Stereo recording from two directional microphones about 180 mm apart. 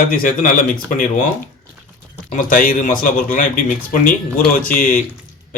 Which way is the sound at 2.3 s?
50° left (ahead or behind).